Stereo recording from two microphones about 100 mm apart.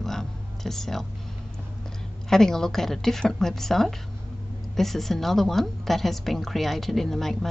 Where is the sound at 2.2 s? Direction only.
5° left (ahead or behind).